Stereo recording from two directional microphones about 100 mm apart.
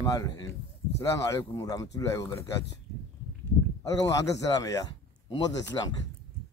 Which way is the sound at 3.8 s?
35° left (ahead or behind).